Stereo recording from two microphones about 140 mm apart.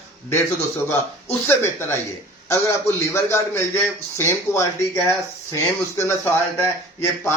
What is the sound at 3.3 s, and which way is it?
Speech, 20° left (ahead or behind).